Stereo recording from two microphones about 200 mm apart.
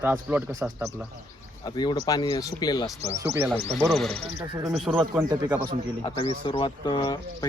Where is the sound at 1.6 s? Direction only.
20° left (ahead or behind).